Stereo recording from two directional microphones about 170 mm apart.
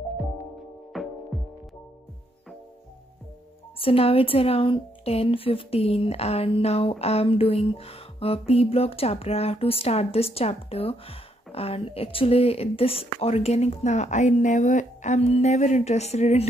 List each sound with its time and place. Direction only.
0.9 s music: centre (ahead or behind)
3.8 s a woman's voice: 35° left (ahead or behind)